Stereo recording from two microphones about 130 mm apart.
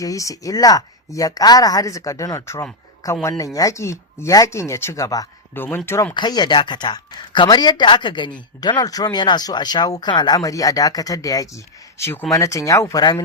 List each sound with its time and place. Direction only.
0.0 s speech: 25° left (ahead or behind)
5.5 s speech: 15° left (ahead or behind)
6.1 s speech: 35° left (ahead or behind)